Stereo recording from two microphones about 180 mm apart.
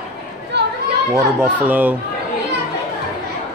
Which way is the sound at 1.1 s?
15° right (ahead or behind).